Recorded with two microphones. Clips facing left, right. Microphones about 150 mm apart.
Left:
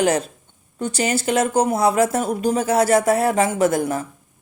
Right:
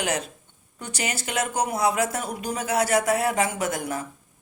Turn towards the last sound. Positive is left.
turn(degrees=30)  # may be behind; listen again after turning